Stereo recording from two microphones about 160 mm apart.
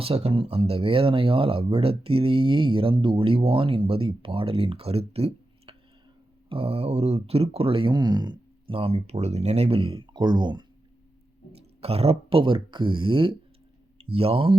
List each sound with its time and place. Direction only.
0.0 s speech: 40° right (ahead or behind)
11.5 s speech: 40° right (ahead or behind)